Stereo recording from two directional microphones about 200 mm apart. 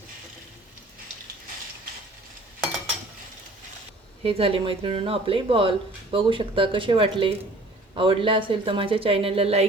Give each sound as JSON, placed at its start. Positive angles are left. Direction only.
{"t": 4.2, "sound": "speech", "side_deg": -30}